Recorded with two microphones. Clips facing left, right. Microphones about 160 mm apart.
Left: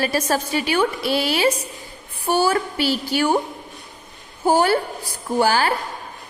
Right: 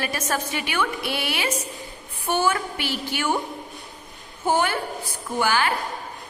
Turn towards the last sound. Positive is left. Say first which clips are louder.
# left 4 dB
turn(degrees=35)  # may be behind; listen again after turning